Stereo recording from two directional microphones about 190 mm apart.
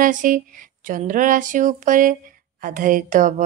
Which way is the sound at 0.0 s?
45° right (ahead or behind).